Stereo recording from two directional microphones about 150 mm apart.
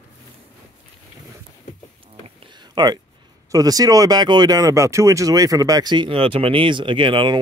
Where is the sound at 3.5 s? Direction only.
25° right (ahead or behind).